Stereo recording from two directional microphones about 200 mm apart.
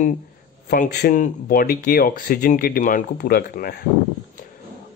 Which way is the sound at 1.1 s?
40° left (ahead or behind).